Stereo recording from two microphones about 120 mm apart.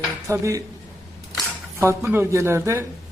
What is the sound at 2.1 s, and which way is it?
Speech, 20° right (ahead or behind).